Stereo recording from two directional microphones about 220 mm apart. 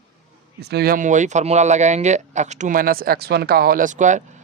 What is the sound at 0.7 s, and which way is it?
Speech, 45° right (ahead or behind).